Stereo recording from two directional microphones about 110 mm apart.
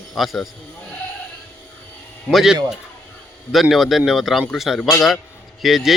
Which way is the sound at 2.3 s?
Centre (ahead or behind).